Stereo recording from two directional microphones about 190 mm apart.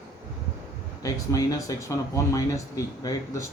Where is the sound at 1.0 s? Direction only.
20° left (ahead or behind).